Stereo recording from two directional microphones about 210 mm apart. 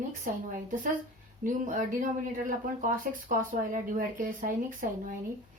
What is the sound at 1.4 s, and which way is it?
Speech, 40° right (ahead or behind).